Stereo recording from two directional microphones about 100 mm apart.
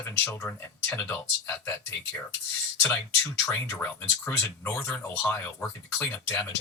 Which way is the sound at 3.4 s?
25° left (ahead or behind).